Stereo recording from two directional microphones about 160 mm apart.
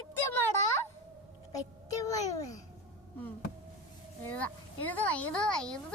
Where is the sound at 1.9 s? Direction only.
20° left (ahead or behind).